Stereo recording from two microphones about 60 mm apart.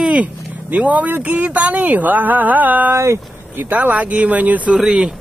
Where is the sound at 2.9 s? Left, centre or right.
Right.